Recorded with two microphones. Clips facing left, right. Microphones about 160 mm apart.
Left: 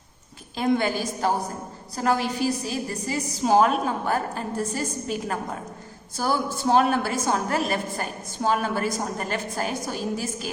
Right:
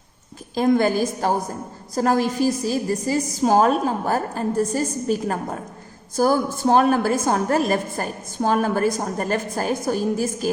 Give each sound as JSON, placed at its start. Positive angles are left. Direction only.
{"t": 0.5, "sound": "a woman's voice", "side_deg": -40}